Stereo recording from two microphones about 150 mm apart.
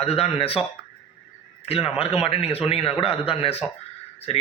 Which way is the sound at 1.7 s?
40° left (ahead or behind).